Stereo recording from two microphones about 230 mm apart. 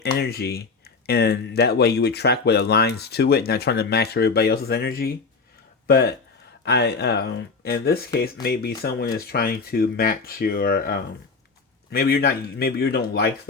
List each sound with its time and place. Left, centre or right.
0.0 s speech: left